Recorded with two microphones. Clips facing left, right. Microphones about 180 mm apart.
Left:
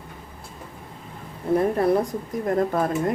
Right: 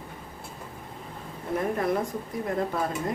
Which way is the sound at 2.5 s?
50° left (ahead or behind).